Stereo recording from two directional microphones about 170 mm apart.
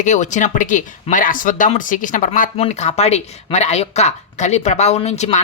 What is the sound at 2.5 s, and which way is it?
Speech, 40° left (ahead or behind).